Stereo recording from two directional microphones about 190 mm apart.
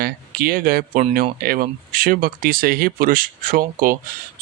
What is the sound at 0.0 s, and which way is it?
Speech, 50° right (ahead or behind).